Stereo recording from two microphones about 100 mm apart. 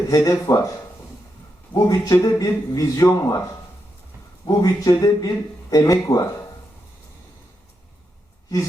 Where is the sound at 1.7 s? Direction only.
35° left (ahead or behind).